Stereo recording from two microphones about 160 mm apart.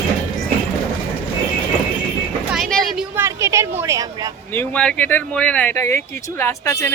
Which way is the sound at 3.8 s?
20° right (ahead or behind).